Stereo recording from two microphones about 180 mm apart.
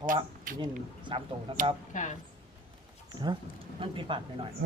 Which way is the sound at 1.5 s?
30° right (ahead or behind).